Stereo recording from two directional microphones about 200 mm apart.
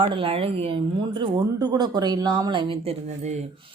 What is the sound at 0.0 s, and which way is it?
Speech, 25° right (ahead or behind).